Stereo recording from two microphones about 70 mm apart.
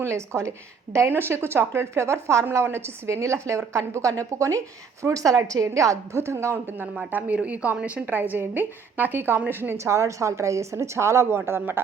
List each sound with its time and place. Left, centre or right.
0.0 s a woman's voice: right
6.9 s a woman's voice: right
9.7 s a woman's voice: right